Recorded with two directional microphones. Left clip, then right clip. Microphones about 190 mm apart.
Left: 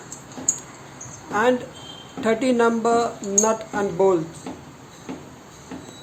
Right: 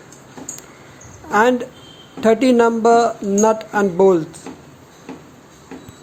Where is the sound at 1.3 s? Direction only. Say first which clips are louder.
Right 5 dB; 35° right (ahead or behind).